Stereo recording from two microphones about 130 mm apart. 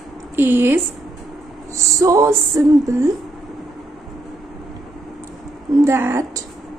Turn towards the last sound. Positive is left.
turn(degrees=-20)  # may be behind; listen again after turning